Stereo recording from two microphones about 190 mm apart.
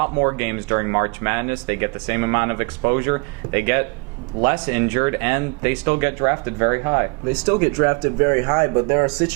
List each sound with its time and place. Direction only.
0.0 s speech: 20° right (ahead or behind)